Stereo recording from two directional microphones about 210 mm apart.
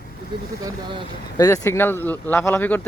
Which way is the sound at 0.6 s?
20° right (ahead or behind).